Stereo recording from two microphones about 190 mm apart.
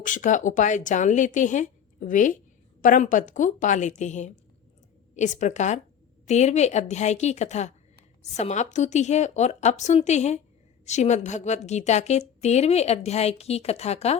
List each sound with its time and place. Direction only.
0.0 s speech: 40° left (ahead or behind)